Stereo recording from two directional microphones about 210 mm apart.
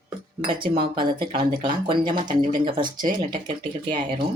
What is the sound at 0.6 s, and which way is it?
Speech, 25° right (ahead or behind).